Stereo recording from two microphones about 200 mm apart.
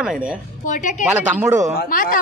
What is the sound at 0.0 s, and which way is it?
Speech, 5° right (ahead or behind).